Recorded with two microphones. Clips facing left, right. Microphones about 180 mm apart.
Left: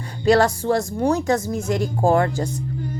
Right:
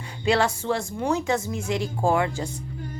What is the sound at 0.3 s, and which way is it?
A woman's voice, 40° left (ahead or behind).